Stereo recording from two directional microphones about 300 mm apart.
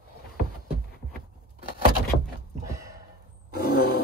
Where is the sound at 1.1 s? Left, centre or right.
Left.